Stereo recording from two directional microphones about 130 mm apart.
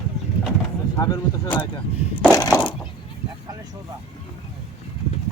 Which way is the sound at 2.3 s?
30° left (ahead or behind).